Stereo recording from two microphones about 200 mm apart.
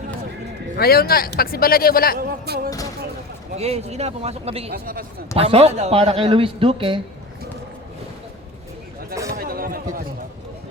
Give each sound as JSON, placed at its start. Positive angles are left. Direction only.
{"t": 0.8, "sound": "speech", "side_deg": 50}
{"t": 2.1, "sound": "speech", "side_deg": -50}
{"t": 3.6, "sound": "speech", "side_deg": -30}
{"t": 4.7, "sound": "speech", "side_deg": -45}
{"t": 5.4, "sound": "speech", "side_deg": -30}
{"t": 9.3, "sound": "a sound", "side_deg": -45}